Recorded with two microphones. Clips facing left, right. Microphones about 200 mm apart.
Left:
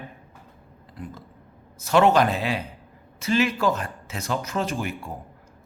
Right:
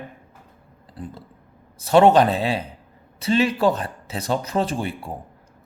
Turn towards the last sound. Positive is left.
turn(degrees=-30)  # may be behind; listen again after turning